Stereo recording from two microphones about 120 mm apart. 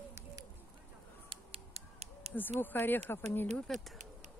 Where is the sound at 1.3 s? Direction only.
55° right (ahead or behind).